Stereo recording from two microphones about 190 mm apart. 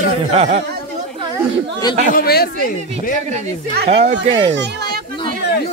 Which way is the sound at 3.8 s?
35° right (ahead or behind).